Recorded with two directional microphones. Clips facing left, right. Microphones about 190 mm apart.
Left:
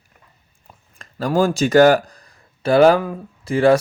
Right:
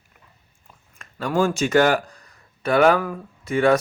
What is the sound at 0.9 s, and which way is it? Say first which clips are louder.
Speech: left 3 dB; 35° left (ahead or behind).